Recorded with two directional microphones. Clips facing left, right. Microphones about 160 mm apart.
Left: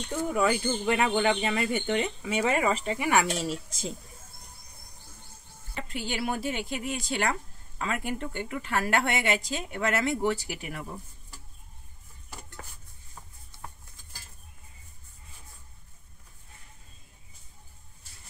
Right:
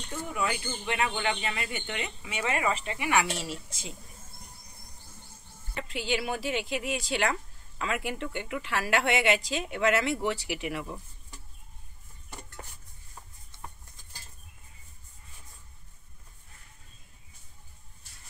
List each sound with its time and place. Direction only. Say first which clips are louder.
0.3 s speech: left 6 dB; 40° left (ahead or behind)
5.9 s a woman's voice: right 1 dB; 50° left (ahead or behind)
12.3 s dishes: even; 5° left (ahead or behind)